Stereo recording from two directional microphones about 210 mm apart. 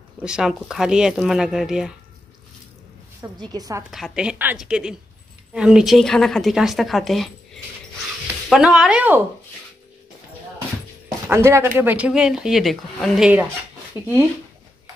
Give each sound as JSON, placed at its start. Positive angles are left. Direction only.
{"t": 0.2, "sound": "speech", "side_deg": -5}
{"t": 3.4, "sound": "a woman's voice", "side_deg": -15}
{"t": 3.9, "sound": "speech", "side_deg": 0}
{"t": 11.2, "sound": "speech", "side_deg": -10}